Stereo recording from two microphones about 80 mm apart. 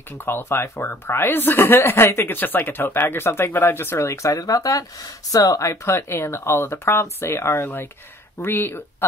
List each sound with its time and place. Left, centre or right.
0.1 s speech: left